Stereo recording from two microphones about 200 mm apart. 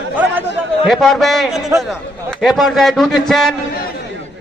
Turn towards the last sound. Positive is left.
turn(degrees=0)  # may be behind; listen again after turning